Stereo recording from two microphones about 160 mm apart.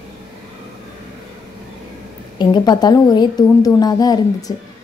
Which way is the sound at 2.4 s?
25° left (ahead or behind).